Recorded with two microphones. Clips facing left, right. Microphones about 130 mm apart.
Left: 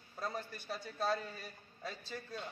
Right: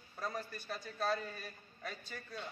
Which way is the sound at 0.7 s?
Centre (ahead or behind).